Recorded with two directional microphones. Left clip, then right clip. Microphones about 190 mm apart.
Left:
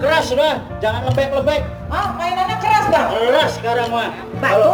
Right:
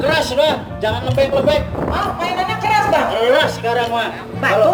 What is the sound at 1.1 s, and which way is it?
Music, 25° left (ahead or behind).